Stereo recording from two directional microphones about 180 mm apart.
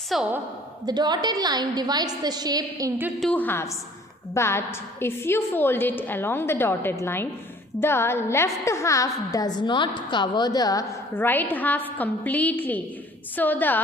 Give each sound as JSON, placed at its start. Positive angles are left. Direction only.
{"t": 0.1, "sound": "a woman's voice", "side_deg": 0}
{"t": 0.9, "sound": "a woman's voice", "side_deg": -25}
{"t": 3.2, "sound": "a woman's voice", "side_deg": 5}